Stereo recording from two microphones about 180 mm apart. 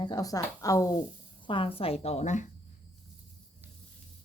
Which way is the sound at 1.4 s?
30° left (ahead or behind).